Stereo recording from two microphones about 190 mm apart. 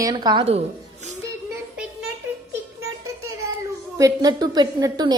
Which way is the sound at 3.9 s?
20° right (ahead or behind).